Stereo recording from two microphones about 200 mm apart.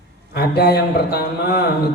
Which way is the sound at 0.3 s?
55° left (ahead or behind).